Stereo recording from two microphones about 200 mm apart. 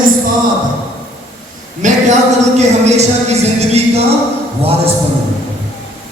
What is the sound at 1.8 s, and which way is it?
Speech, 40° right (ahead or behind).